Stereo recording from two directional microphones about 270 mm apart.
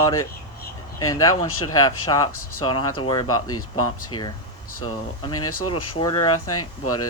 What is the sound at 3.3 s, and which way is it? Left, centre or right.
Speech, left.